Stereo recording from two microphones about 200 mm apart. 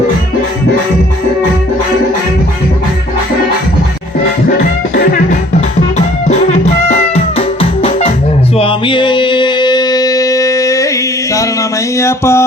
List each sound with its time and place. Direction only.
4.9 s music: 45° left (ahead or behind); by 10.8 s 15° left (ahead or behind)
11.9 s music: 15° left (ahead or behind)